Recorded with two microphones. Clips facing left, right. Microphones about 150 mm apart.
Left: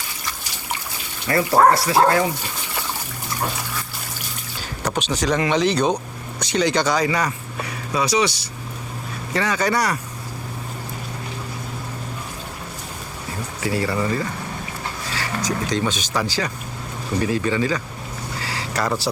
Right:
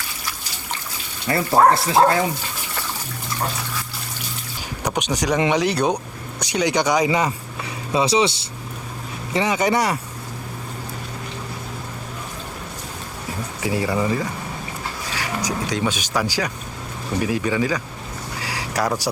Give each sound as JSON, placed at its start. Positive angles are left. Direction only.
{"t": 1.3, "sound": "speech", "side_deg": -25}
{"t": 4.8, "sound": "speech", "side_deg": -15}
{"t": 13.6, "sound": "speech", "side_deg": -15}
{"t": 18.4, "sound": "a sound", "side_deg": -10}